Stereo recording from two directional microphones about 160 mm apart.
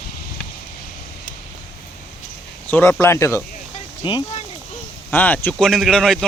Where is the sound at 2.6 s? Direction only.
15° left (ahead or behind).